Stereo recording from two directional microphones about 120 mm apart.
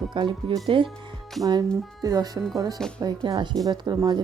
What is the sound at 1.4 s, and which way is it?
Speech, 30° right (ahead or behind).